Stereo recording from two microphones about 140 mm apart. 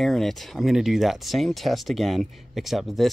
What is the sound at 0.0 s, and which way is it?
Speech, centre (ahead or behind).